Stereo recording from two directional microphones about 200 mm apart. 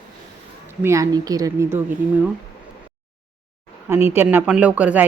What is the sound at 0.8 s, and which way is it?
Speech, 15° right (ahead or behind).